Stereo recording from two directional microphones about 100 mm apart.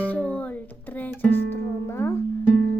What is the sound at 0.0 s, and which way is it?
Music, 15° left (ahead or behind).